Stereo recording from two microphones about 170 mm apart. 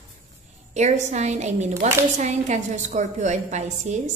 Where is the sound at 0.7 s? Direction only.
45° right (ahead or behind).